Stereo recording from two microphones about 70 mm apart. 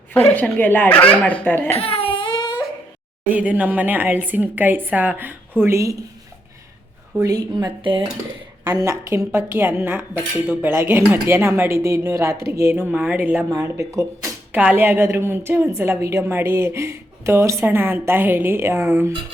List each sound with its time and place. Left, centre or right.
0.1 s speech: left
2.2 s a sound: left
3.2 s a woman's voice: right
7.3 s speech: right
8.8 s speech: right
12.9 s a woman's voice: right
13.5 s speech: right
14.5 s speech: right
17.7 s speech: right